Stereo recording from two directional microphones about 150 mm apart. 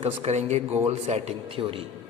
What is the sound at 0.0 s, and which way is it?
A man's voice, 45° right (ahead or behind).